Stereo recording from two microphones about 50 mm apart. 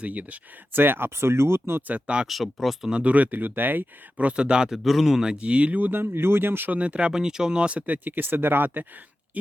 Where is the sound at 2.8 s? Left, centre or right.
Right.